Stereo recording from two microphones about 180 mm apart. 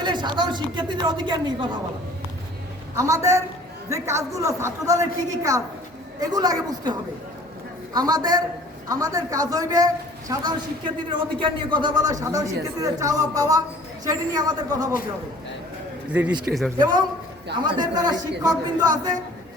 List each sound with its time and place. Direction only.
0.0 s a woman's voice: 25° right (ahead or behind)
2.9 s a woman's voice: 15° right (ahead or behind)
7.9 s a woman's voice: 20° right (ahead or behind)
16.0 s a man's voice: 10° right (ahead or behind)
16.7 s a woman's voice: 25° right (ahead or behind)